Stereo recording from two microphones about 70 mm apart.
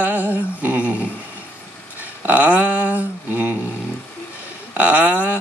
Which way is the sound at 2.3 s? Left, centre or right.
Right.